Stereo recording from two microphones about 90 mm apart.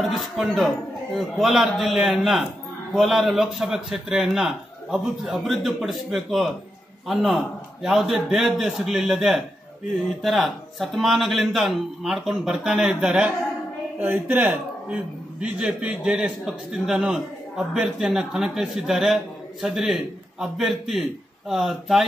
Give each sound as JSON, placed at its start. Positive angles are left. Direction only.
{"t": 0.1, "sound": "a man's voice", "side_deg": 0}